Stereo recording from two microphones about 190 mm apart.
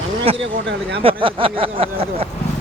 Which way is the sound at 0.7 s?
60° right (ahead or behind).